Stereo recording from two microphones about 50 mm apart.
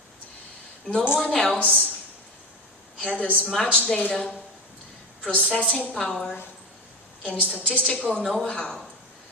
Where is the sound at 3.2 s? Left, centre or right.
Left.